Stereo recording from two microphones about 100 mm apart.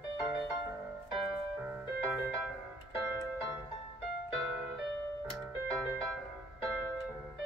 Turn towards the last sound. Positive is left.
turn(degrees=0)  # may be behind; listen again after turning